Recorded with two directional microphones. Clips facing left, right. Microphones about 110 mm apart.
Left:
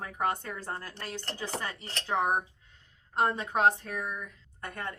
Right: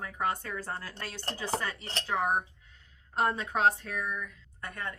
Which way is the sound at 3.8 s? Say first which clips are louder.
Even; 30° left (ahead or behind).